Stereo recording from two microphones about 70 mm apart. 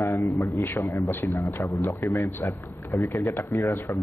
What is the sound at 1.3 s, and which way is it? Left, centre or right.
Speech, left.